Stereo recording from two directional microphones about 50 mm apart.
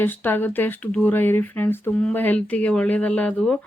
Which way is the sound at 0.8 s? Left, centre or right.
Left.